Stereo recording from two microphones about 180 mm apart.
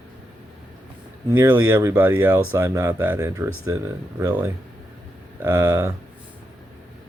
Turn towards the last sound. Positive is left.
turn(degrees=-15)  # may be behind; listen again after turning